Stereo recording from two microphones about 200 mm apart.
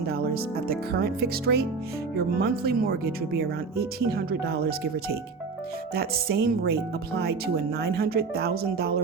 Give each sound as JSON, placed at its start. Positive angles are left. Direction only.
{"t": 0.7, "sound": "speech", "side_deg": -50}